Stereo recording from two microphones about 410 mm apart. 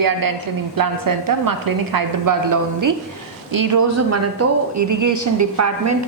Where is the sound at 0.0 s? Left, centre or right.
Right.